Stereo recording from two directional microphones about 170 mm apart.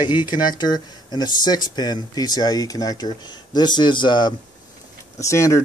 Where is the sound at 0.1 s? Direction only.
25° left (ahead or behind).